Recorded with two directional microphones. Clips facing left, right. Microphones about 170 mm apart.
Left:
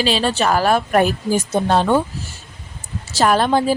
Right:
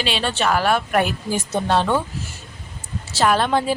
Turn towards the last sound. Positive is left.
turn(degrees=35)  # may be behind; listen again after turning